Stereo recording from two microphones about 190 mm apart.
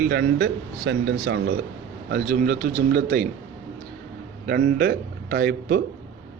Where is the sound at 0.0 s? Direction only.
55° right (ahead or behind).